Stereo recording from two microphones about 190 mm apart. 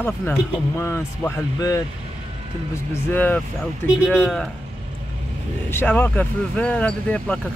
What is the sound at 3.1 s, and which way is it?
Speech, 10° left (ahead or behind).